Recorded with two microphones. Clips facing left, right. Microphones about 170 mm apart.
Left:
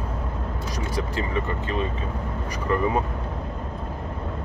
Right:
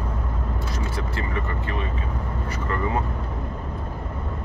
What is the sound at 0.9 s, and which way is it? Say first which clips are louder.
Speech: left 6 dB; 20° left (ahead or behind).